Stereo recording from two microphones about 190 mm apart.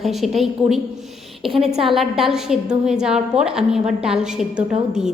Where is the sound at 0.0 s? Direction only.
Centre (ahead or behind).